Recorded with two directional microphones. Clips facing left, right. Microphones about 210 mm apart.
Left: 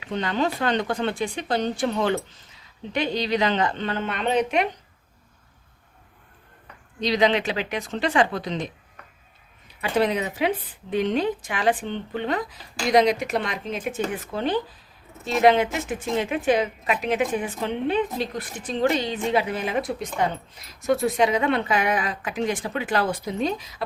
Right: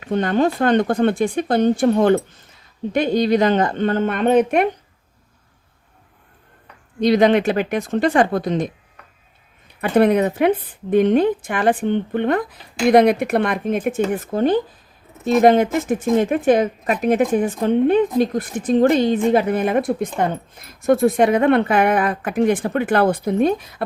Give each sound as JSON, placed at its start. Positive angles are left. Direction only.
{"t": 0.0, "sound": "a woman's voice", "side_deg": -50}
{"t": 7.0, "sound": "a woman's voice", "side_deg": -50}
{"t": 9.8, "sound": "a woman's voice", "side_deg": -55}